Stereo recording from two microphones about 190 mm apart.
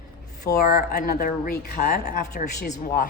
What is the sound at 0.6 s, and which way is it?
A woman's voice, 50° left (ahead or behind).